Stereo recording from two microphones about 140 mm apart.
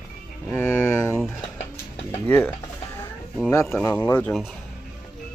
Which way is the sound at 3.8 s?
15° left (ahead or behind).